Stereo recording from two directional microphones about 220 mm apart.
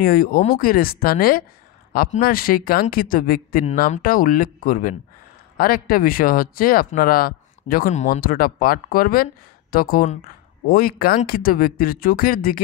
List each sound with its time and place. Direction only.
0.0 s speech: 40° left (ahead or behind)